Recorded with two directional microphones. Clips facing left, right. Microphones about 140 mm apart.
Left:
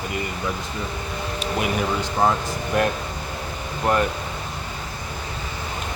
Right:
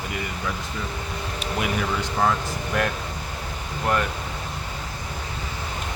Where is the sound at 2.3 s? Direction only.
25° left (ahead or behind).